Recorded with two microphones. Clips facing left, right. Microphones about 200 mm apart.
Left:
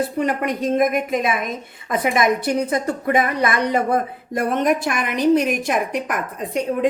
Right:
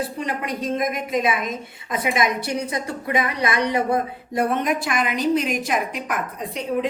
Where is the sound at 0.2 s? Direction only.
55° left (ahead or behind).